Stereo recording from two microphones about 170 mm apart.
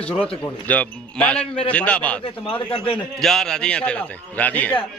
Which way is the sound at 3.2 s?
Centre (ahead or behind).